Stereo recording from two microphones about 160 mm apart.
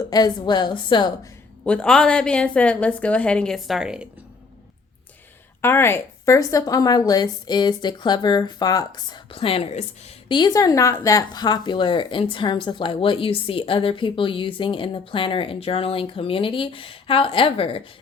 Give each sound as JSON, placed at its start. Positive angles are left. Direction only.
{"t": 0.1, "sound": "a woman's voice", "side_deg": 25}
{"t": 1.6, "sound": "a woman's voice", "side_deg": 5}
{"t": 5.6, "sound": "a woman's voice", "side_deg": 15}
{"t": 10.3, "sound": "speech", "side_deg": 25}